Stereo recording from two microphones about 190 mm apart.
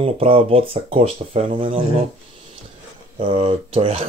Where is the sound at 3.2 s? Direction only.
30° right (ahead or behind).